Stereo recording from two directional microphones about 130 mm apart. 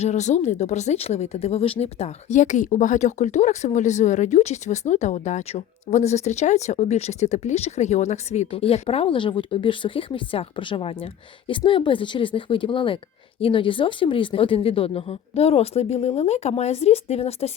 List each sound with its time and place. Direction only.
0.0 s speech: 60° left (ahead or behind)